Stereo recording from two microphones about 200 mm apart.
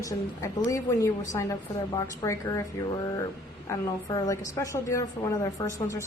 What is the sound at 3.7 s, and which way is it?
A woman's voice, 15° left (ahead or behind).